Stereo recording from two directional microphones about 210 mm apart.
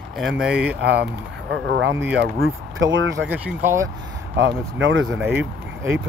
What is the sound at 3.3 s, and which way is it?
Speech, 10° right (ahead or behind).